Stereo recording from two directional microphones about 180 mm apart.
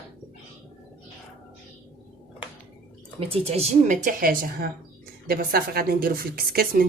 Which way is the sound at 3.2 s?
30° right (ahead or behind).